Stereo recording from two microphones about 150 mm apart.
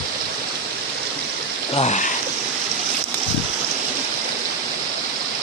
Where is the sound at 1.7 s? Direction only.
45° left (ahead or behind).